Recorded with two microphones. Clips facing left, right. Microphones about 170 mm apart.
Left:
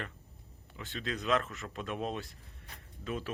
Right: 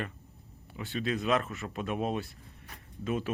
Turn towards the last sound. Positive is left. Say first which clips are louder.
# right 5 dB
turn(degrees=-15)  # may be behind; listen again after turning